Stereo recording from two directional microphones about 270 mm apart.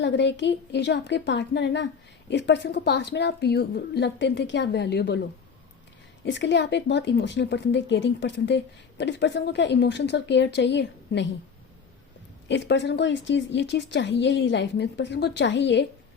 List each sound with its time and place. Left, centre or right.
0.0 s speech: left
6.2 s speech: left
12.5 s speech: left